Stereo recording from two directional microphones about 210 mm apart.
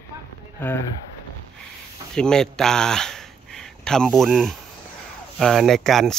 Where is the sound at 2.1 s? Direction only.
5° left (ahead or behind).